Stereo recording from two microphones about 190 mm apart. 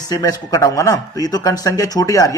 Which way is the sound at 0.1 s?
20° left (ahead or behind).